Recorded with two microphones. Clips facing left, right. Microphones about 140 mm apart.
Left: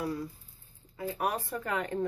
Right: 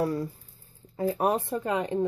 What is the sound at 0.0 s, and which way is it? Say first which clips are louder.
A woman's voice: right 6 dB; 40° right (ahead or behind).